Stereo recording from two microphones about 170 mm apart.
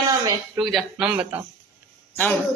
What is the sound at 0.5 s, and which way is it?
Speech, centre (ahead or behind).